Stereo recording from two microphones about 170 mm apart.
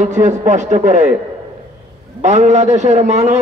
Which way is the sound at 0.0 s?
45° right (ahead or behind).